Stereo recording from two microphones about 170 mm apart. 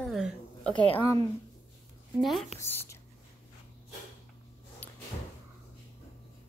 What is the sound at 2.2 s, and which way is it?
Speech, centre (ahead or behind).